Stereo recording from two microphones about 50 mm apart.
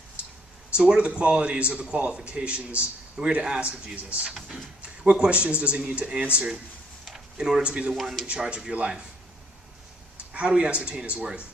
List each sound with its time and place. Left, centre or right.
0.2 s a sound: right
0.8 s speech: right
4.2 s speech: centre
7.0 s a sound: centre
7.6 s speech: right
7.9 s speech: centre
8.4 s speech: centre
10.3 s speech: right